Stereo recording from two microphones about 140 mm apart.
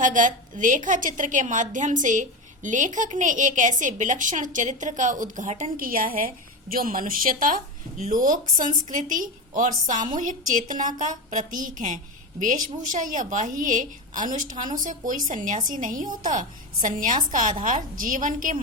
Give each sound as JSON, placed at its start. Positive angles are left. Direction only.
{"t": 0.0, "sound": "a woman's voice", "side_deg": -70}